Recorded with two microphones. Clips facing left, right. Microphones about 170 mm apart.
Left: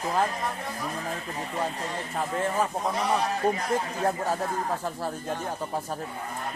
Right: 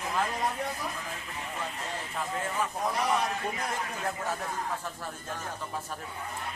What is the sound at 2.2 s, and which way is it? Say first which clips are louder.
A man's voice: left 6 dB; 40° left (ahead or behind).